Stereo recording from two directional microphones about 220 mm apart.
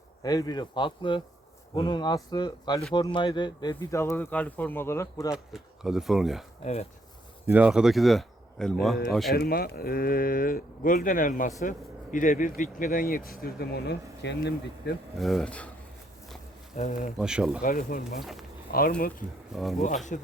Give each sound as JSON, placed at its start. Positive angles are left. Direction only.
{"t": 0.2, "sound": "speech", "side_deg": 15}
{"t": 5.5, "sound": "speech", "side_deg": 0}
{"t": 7.4, "sound": "speech", "side_deg": -5}
{"t": 9.3, "sound": "speech", "side_deg": 45}
{"t": 15.2, "sound": "speech", "side_deg": 0}
{"t": 16.7, "sound": "speech", "side_deg": 30}
{"t": 17.2, "sound": "speech", "side_deg": -5}
{"t": 17.6, "sound": "speech", "side_deg": 40}
{"t": 18.2, "sound": "speech", "side_deg": 0}
{"t": 18.7, "sound": "speech", "side_deg": 45}
{"t": 19.5, "sound": "speech", "side_deg": 0}
{"t": 20.1, "sound": "speech", "side_deg": 35}